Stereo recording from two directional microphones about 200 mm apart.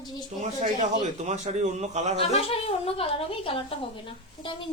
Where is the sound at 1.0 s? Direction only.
35° right (ahead or behind).